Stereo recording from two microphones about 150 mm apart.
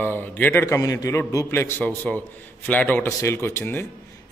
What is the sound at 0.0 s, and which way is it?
A man's voice, 15° left (ahead or behind).